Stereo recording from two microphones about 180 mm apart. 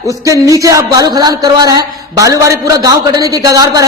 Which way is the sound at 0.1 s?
20° right (ahead or behind).